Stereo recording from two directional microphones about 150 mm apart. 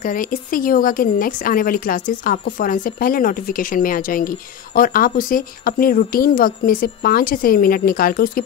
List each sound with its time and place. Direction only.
0.0 s speech: 65° left (ahead or behind)